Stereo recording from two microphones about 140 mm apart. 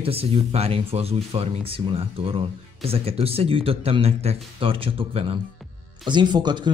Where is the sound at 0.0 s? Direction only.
45° right (ahead or behind).